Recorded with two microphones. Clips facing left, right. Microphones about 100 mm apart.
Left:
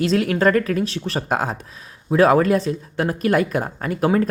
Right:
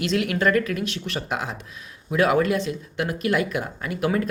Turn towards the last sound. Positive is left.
turn(degrees=40)  # may be behind; listen again after turning